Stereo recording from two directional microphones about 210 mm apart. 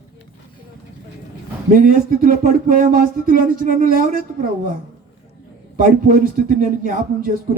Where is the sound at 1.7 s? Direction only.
40° right (ahead or behind).